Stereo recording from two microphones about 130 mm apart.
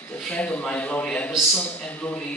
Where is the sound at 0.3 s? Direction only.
10° left (ahead or behind).